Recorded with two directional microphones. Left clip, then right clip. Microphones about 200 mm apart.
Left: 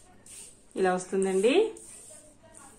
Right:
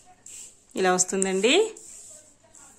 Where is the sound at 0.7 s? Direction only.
55° right (ahead or behind).